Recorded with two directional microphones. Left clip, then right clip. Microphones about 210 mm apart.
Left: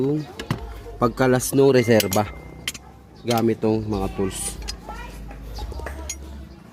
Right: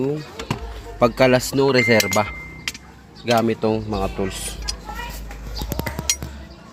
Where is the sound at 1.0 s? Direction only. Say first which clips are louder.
Right 4 dB; 5° left (ahead or behind).